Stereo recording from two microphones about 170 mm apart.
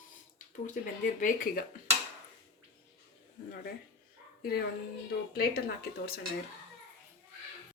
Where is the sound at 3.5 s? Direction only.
60° left (ahead or behind).